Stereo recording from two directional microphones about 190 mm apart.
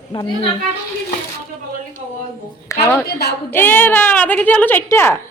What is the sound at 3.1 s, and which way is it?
Speech, 55° left (ahead or behind).